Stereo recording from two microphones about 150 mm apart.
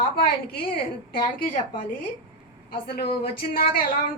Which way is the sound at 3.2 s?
80° left.